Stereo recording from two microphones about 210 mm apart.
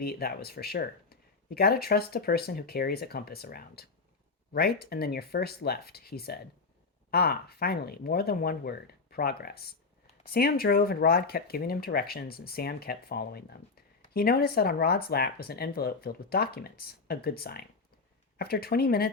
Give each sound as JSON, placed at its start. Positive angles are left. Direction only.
{"t": 0.0, "sound": "speech", "side_deg": 45}